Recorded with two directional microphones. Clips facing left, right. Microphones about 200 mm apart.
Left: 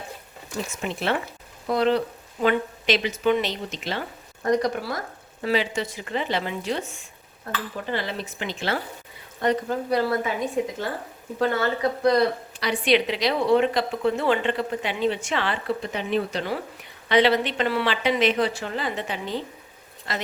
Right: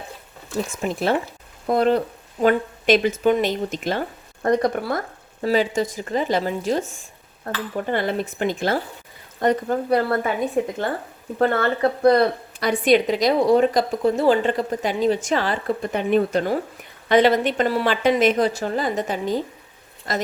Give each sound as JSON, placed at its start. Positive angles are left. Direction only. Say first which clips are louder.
{"t": 0.7, "sound": "a woman's voice", "louder": "right 4 dB", "side_deg": -45}
{"t": 5.4, "sound": "speech", "louder": "right 5 dB", "side_deg": -45}
{"t": 7.5, "sound": "a woman's voice", "louder": "right 5 dB", "side_deg": -55}
{"t": 11.3, "sound": "a woman's voice", "louder": "right 4 dB", "side_deg": -55}